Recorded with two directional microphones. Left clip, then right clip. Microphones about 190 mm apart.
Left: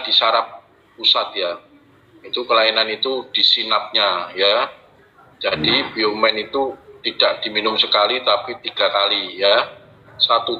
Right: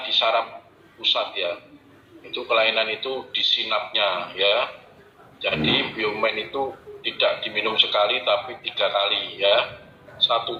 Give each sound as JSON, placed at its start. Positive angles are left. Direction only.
{"t": 0.0, "sound": "a man's voice", "side_deg": 45}